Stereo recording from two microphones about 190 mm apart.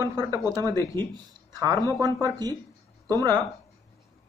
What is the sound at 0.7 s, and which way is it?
Speech, 15° left (ahead or behind).